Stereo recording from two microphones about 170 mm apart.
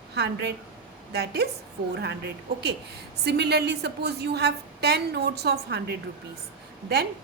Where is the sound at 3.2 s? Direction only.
75° right (ahead or behind).